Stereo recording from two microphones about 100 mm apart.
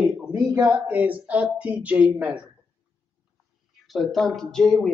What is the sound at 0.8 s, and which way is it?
Speech, 15° right (ahead or behind).